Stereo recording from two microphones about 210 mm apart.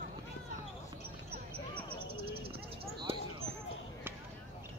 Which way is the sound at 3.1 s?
25° right (ahead or behind).